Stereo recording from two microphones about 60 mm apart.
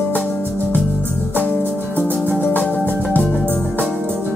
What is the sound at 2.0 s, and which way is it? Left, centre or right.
Music, left.